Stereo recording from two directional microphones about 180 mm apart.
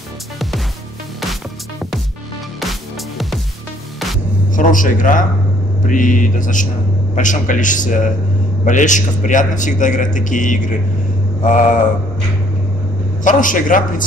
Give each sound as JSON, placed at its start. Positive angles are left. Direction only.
{"t": 4.6, "sound": "speech", "side_deg": 50}
{"t": 13.2, "sound": "speech", "side_deg": 45}